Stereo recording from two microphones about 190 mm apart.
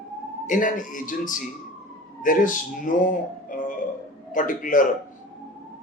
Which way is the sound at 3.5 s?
45° left (ahead or behind).